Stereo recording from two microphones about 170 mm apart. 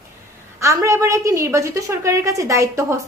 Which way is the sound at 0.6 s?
15° right (ahead or behind).